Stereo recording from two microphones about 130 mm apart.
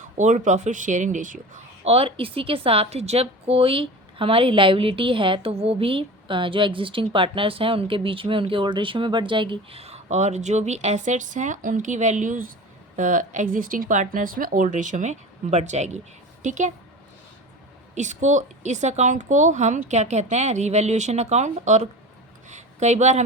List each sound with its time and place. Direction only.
0.2 s a woman's voice: 65° right (ahead or behind)
1.8 s a woman's voice: 50° right (ahead or behind); by 16.7 s 70° right (ahead or behind)
17.9 s a woman's voice: 65° right (ahead or behind)